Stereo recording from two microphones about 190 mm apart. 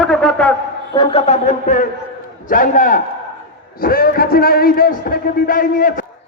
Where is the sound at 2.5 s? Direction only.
45° left (ahead or behind).